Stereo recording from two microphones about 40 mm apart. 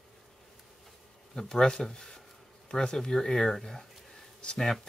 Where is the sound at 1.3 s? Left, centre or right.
Centre.